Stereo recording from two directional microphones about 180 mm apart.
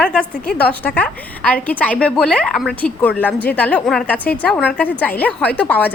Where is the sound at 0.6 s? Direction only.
10° left (ahead or behind).